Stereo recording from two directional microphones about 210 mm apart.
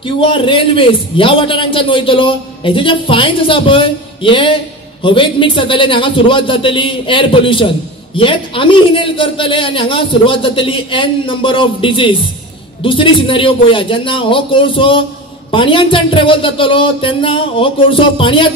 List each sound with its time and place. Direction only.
0.0 s a man's voice: 25° left (ahead or behind)